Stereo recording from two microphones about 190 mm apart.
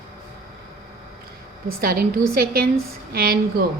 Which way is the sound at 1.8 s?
55° right (ahead or behind).